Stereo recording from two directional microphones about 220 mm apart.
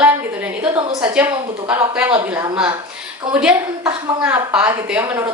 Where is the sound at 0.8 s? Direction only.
20° right (ahead or behind).